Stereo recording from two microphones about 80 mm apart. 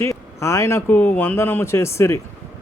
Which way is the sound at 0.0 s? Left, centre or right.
Left.